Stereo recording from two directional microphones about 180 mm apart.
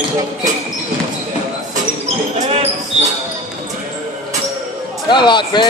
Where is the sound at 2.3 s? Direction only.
35° right (ahead or behind).